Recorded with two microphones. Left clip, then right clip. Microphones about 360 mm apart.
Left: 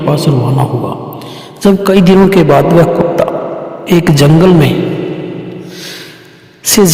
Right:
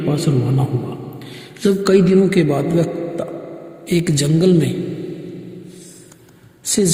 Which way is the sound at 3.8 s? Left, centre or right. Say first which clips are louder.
Left 10 dB; left.